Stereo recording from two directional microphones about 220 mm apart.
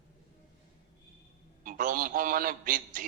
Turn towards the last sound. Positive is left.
turn(degrees=-35)  # may be behind; listen again after turning